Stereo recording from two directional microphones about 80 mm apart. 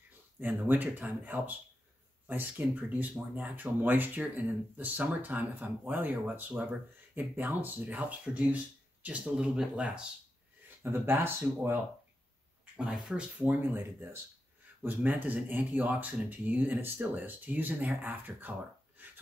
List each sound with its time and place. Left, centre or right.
0.4 s speech: right
10.8 s speech: right
12.7 s speech: centre
13.6 s speech: right
19.0 s a sound: right